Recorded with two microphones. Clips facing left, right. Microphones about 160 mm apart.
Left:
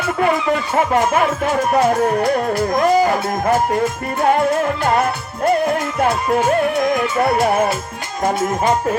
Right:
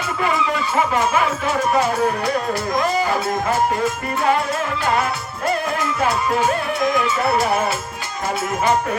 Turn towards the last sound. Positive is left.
turn(degrees=50)  # may be behind; listen again after turning